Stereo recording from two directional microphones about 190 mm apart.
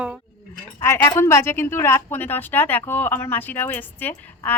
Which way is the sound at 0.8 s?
15° left (ahead or behind).